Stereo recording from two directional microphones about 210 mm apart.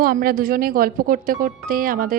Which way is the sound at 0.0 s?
40° right (ahead or behind).